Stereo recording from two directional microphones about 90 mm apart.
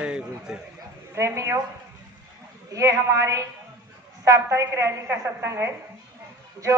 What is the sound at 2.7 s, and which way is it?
A woman's voice, 35° right (ahead or behind).